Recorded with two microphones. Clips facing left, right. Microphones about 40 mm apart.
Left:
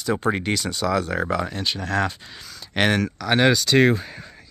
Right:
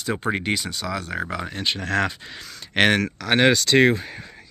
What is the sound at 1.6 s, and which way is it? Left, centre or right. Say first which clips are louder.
Speech: right 4 dB; right.